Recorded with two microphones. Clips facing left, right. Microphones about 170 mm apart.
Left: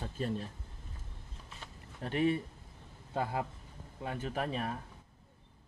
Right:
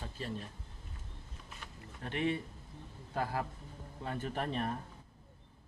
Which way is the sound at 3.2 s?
20° left (ahead or behind).